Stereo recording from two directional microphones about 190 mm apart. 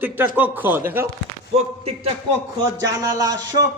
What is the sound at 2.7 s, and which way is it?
Speech, 20° right (ahead or behind).